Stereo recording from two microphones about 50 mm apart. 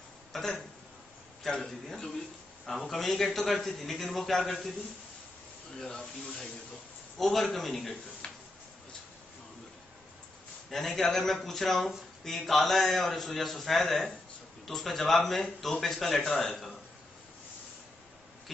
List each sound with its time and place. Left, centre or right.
0.3 s a man's voice: centre
7.2 s a man's voice: centre
8.2 s a sound: centre
10.7 s a man's voice: centre